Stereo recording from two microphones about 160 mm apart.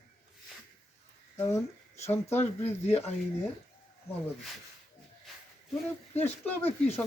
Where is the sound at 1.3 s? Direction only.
15° left (ahead or behind).